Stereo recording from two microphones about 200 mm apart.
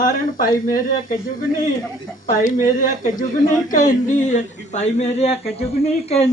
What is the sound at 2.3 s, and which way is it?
Speech, 40° left (ahead or behind).